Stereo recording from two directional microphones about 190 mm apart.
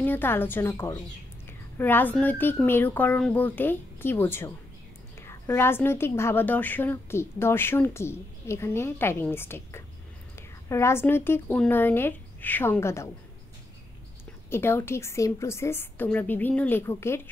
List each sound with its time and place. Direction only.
0.0 s a woman's voice: 10° left (ahead or behind)
14.5 s a woman's voice: 10° left (ahead or behind)